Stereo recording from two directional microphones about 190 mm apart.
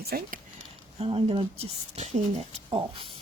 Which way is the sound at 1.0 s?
30° right (ahead or behind).